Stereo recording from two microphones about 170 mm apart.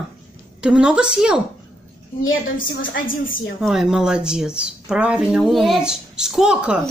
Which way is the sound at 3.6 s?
5° right (ahead or behind).